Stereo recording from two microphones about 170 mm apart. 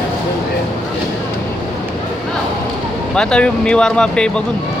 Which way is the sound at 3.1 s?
5° left (ahead or behind).